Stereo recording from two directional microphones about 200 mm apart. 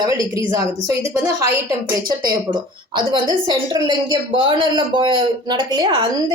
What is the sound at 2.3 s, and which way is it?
A woman's voice, 20° right (ahead or behind).